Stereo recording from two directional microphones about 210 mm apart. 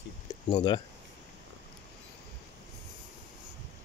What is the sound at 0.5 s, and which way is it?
Speech, 20° left (ahead or behind).